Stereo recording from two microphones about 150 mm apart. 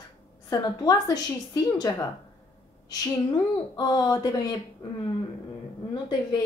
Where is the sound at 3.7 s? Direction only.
25° left (ahead or behind).